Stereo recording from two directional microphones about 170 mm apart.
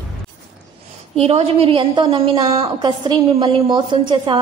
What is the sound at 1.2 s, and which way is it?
A woman's voice, 35° right (ahead or behind).